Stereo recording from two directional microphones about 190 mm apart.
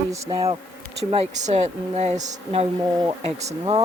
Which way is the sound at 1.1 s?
40° right (ahead or behind).